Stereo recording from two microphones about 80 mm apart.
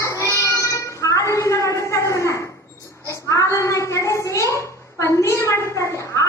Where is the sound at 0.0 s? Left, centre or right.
Left.